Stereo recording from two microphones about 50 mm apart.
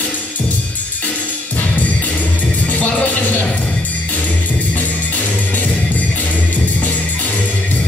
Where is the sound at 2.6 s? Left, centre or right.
Left.